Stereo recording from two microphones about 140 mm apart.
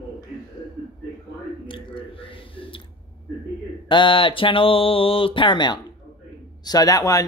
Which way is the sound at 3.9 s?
35° left (ahead or behind).